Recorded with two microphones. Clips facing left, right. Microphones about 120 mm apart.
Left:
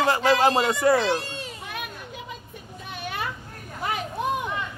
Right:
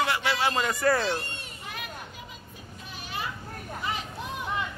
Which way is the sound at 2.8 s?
60° left (ahead or behind).